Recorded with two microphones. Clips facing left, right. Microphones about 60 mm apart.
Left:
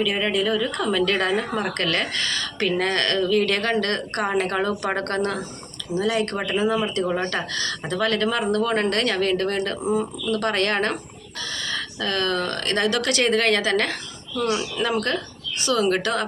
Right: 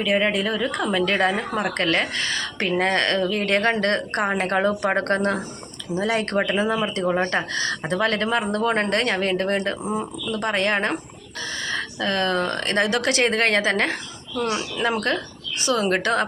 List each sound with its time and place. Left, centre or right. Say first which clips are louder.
0.0 s a woman's voice: right 1 dB; right
7.3 s a woman's voice: right 3 dB; right